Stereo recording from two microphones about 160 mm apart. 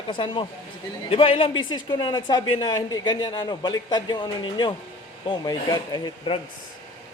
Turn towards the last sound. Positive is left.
turn(degrees=25)  # may be behind; listen again after turning